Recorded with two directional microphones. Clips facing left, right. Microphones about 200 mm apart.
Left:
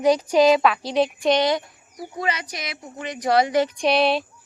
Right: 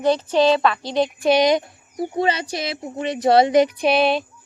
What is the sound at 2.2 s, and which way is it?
A woman's voice, 30° right (ahead or behind).